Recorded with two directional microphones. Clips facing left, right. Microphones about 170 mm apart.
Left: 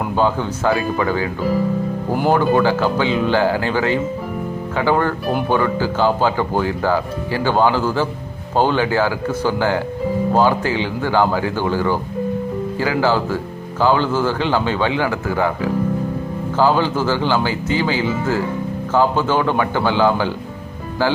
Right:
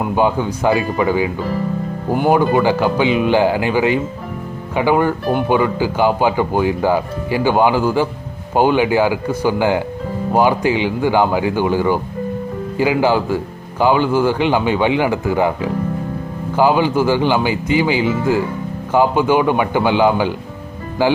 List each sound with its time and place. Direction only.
0.2 s speech: 15° right (ahead or behind)
2.3 s speech: 15° right (ahead or behind)